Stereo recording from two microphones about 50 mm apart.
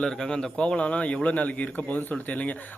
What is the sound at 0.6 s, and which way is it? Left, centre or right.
Speech, left.